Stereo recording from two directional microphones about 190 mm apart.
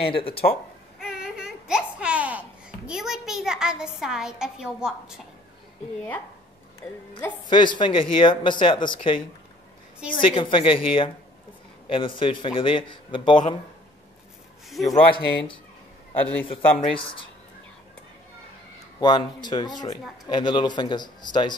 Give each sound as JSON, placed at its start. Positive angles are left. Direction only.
{"t": 0.0, "sound": "speech", "side_deg": 30}
{"t": 0.9, "sound": "a sound", "side_deg": -5}
{"t": 2.9, "sound": "a woman's voice", "side_deg": 0}
{"t": 5.9, "sound": "speech", "side_deg": 10}
{"t": 7.4, "sound": "speech", "side_deg": 25}
{"t": 10.2, "sound": "speech", "side_deg": 25}
{"t": 14.9, "sound": "speech", "side_deg": 25}
{"t": 16.2, "sound": "speech", "side_deg": 10}
{"t": 16.4, "sound": "speech", "side_deg": 25}
{"t": 18.9, "sound": "speech", "side_deg": 20}